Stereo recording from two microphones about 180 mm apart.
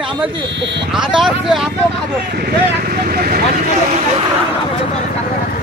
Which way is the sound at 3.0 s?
55° right (ahead or behind).